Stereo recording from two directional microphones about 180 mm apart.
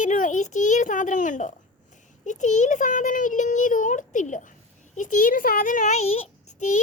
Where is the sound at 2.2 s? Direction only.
40° left (ahead or behind).